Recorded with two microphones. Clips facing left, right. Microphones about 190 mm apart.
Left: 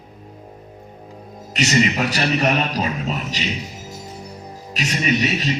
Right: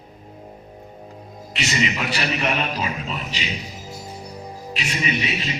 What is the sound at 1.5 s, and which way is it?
A man's voice, 40° left (ahead or behind).